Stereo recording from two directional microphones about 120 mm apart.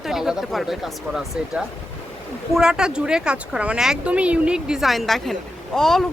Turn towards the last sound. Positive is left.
turn(degrees=5)  # may be behind; listen again after turning